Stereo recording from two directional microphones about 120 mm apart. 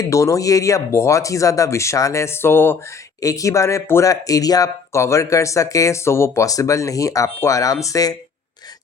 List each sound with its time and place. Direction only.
0.0 s speech: 25° left (ahead or behind)